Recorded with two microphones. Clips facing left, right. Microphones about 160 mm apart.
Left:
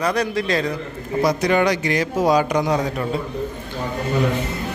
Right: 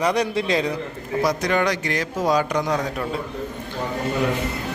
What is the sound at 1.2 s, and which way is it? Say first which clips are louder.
A man's voice: left 3 dB; 5° left (ahead or behind).